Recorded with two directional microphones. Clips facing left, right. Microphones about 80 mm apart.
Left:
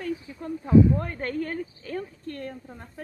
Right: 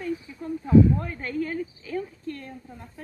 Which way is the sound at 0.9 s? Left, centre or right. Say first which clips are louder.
Even; left.